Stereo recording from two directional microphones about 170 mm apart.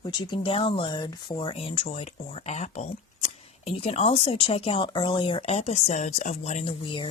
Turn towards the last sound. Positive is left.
turn(degrees=30)  # may be behind; listen again after turning